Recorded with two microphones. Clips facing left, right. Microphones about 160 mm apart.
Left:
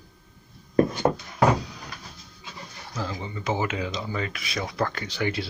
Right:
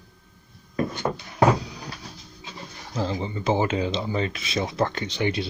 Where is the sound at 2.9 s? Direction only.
30° right (ahead or behind).